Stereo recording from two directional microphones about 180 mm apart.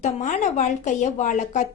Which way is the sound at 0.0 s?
40° left (ahead or behind).